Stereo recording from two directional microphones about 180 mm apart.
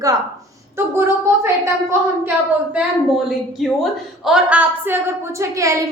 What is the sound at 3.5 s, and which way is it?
A woman's voice, centre (ahead or behind).